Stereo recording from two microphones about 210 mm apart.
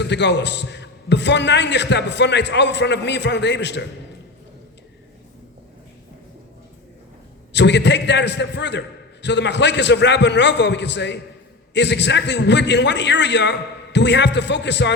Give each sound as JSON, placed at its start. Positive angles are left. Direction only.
{"t": 0.0, "sound": "a man's voice", "side_deg": 55}
{"t": 7.5, "sound": "a man's voice", "side_deg": 55}